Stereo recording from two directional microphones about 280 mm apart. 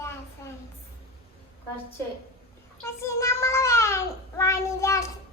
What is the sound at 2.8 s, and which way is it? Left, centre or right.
A child's voice, centre.